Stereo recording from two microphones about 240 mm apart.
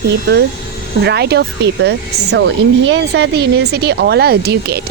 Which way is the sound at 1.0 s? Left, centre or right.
Right.